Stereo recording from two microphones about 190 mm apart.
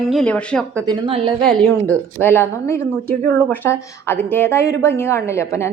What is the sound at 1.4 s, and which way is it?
A woman's voice, 5° left (ahead or behind).